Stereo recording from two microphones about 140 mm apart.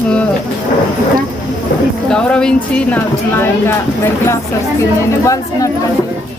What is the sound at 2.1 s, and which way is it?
Speech, 5° left (ahead or behind).